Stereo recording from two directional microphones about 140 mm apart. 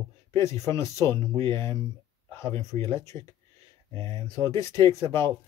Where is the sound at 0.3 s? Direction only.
20° left (ahead or behind).